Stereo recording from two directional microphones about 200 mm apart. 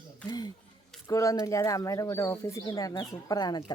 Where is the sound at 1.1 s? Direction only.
15° left (ahead or behind).